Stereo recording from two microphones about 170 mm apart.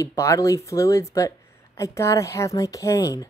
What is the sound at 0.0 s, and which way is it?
A woman's voice, 20° left (ahead or behind).